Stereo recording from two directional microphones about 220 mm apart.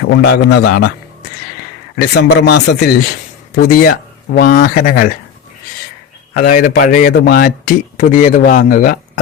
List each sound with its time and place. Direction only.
0.1 s speech: 50° left (ahead or behind)
2.1 s speech: 50° left (ahead or behind)
6.3 s speech: 35° left (ahead or behind)